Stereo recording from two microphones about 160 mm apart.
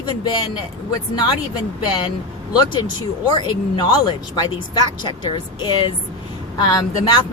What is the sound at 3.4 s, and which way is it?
Speech, 30° left (ahead or behind).